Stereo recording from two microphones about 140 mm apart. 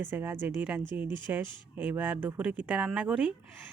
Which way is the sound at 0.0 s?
15° right (ahead or behind).